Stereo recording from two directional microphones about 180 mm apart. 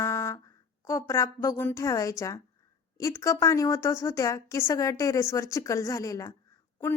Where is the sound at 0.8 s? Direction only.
15° left (ahead or behind).